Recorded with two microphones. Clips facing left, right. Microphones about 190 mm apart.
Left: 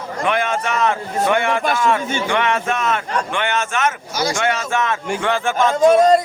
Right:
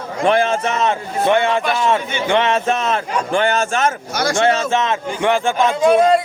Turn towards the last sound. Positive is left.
turn(degrees=40)  # may be behind; listen again after turning